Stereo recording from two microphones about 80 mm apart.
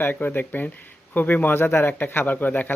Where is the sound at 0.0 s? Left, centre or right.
Left.